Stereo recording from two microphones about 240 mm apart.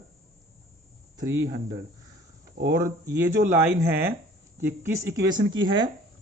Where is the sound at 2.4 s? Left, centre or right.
Right.